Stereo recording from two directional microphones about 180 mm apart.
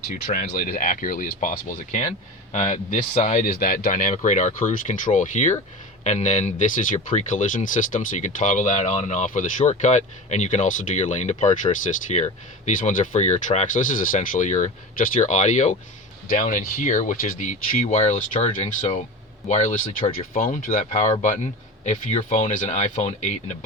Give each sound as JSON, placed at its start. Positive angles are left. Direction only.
{"t": 0.1, "sound": "speech", "side_deg": 45}